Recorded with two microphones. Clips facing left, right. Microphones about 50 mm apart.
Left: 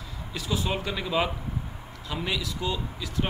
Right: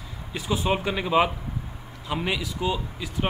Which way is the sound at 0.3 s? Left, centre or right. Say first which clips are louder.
Right 4 dB; right.